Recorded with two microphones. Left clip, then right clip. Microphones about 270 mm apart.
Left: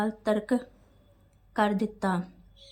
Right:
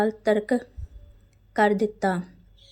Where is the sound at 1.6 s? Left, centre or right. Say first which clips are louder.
Right 6 dB; centre.